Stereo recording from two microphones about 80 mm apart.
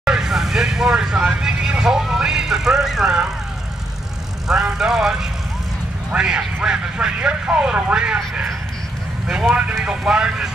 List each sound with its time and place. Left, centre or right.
0.0 s speech: centre
4.5 s speech: centre
9.5 s speech: centre